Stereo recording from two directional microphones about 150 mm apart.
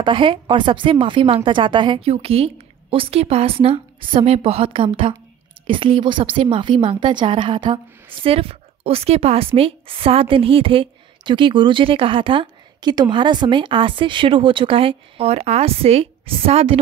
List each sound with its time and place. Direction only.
0.0 s a woman's voice: 35° right (ahead or behind)